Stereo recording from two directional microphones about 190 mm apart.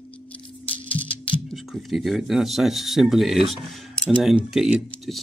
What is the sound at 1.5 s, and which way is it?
Speech, centre (ahead or behind).